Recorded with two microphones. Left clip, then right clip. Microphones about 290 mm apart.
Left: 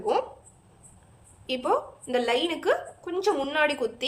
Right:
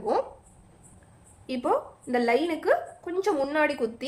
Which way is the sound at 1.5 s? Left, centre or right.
Centre.